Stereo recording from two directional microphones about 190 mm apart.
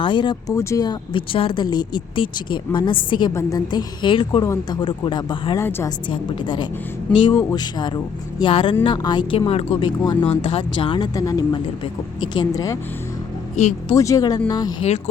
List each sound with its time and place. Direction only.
0.0 s speech: 25° left (ahead or behind)
5.5 s a woman's voice: 15° left (ahead or behind)
6.1 s speech: 25° left (ahead or behind)
13.8 s speech: 15° left (ahead or behind)